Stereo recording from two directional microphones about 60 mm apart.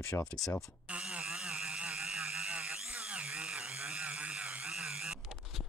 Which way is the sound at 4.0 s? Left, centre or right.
Right.